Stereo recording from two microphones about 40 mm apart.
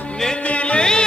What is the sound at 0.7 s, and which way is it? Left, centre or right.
Music, left.